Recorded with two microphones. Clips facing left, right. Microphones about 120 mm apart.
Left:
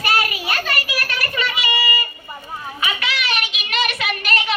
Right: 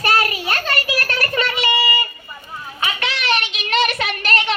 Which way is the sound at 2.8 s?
35° right (ahead or behind).